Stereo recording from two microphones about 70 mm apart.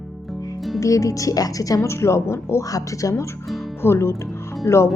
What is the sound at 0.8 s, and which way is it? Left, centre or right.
A woman's voice, left.